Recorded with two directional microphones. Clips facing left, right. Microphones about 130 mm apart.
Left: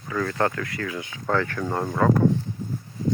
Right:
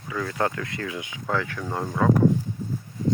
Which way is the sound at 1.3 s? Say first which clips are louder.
Left 3 dB; 5° right (ahead or behind).